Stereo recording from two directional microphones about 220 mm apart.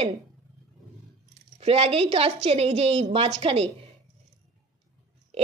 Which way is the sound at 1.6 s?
25° right (ahead or behind).